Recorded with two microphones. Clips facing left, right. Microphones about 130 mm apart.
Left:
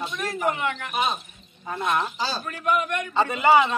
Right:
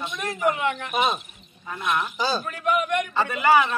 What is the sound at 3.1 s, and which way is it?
Speech, 25° left (ahead or behind).